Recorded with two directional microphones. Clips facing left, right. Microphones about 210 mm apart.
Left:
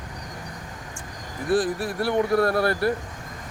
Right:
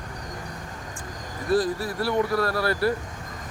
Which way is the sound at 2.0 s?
50° left (ahead or behind).